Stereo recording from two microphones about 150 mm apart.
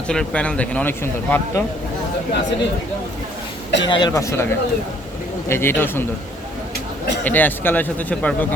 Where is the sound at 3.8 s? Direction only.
30° left (ahead or behind).